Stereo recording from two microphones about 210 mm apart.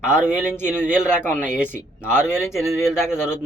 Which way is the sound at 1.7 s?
10° left (ahead or behind).